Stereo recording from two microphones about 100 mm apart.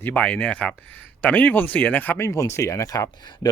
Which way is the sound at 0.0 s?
15° left (ahead or behind).